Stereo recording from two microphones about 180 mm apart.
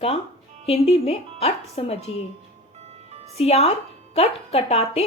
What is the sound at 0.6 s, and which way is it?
Speech, 35° left (ahead or behind).